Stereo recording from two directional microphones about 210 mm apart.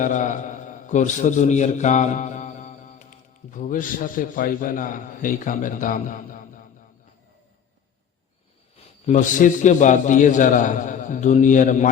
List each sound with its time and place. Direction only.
0.0 s a man's voice: 35° left (ahead or behind)
8.7 s a man's voice: 35° left (ahead or behind)